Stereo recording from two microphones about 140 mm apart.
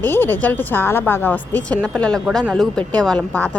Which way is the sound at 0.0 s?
15° left (ahead or behind).